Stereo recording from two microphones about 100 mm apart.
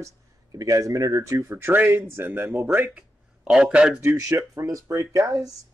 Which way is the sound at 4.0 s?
30° right (ahead or behind).